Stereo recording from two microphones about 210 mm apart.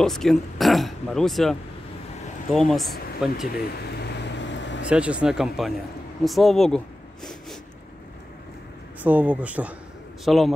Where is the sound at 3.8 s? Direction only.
50° left (ahead or behind).